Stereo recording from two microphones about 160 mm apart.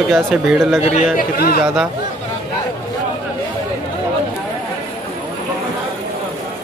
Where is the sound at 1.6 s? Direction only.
5° right (ahead or behind).